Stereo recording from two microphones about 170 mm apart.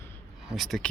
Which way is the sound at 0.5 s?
Centre (ahead or behind).